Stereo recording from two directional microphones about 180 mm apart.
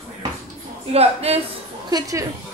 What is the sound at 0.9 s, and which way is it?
Speech, 35° right (ahead or behind).